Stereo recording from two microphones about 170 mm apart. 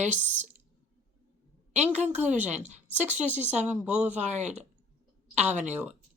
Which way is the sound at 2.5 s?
45° right (ahead or behind).